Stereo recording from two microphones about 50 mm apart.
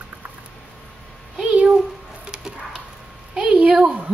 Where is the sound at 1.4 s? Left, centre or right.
Centre.